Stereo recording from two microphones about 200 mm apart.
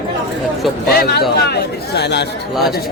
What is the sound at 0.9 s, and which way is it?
Speech, 50° left (ahead or behind).